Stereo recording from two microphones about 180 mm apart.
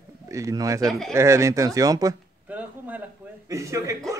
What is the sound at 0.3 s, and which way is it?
A man's voice, 15° right (ahead or behind).